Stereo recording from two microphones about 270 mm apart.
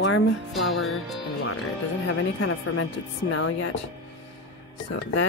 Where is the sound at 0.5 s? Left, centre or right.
Centre.